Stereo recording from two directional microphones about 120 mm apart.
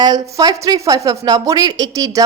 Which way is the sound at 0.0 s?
35° right (ahead or behind).